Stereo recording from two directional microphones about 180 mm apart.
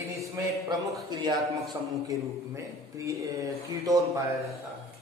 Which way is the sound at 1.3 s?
Centre (ahead or behind).